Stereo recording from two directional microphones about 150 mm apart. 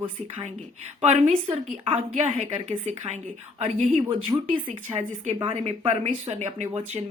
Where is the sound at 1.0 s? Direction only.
50° right (ahead or behind).